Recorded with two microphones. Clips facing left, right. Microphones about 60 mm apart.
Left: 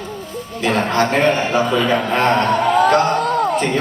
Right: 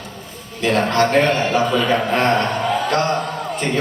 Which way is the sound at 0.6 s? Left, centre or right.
Centre.